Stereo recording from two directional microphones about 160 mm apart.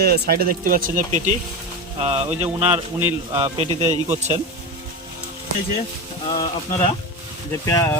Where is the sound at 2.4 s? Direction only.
15° right (ahead or behind).